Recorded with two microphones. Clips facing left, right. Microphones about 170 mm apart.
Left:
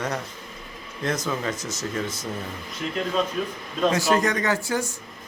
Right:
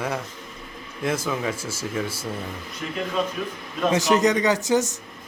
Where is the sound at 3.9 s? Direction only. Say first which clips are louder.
Right 7 dB; 20° right (ahead or behind).